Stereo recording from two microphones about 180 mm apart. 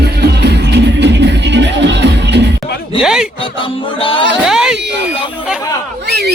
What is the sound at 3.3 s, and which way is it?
Music, 30° left (ahead or behind).